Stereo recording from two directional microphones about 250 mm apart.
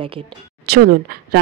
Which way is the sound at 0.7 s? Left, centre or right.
Right.